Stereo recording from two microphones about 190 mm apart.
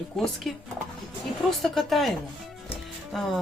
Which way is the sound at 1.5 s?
Centre (ahead or behind).